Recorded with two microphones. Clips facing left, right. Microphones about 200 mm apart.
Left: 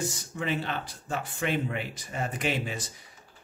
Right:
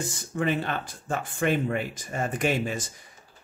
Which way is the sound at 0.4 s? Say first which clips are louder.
Right 4 dB; 50° right (ahead or behind).